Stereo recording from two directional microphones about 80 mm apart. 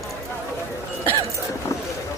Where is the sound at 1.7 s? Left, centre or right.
Left.